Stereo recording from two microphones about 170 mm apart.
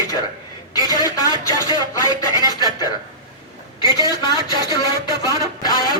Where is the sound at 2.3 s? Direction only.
20° right (ahead or behind).